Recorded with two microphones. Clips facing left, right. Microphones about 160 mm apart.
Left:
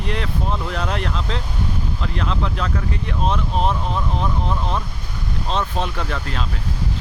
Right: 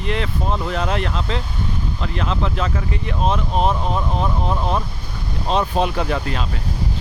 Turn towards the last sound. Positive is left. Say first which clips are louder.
# right 4 dB
turn(degrees=-10)  # may be behind; listen again after turning